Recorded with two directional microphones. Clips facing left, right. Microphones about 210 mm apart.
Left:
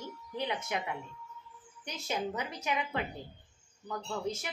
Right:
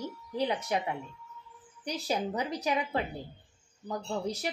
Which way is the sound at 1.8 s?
35° right (ahead or behind).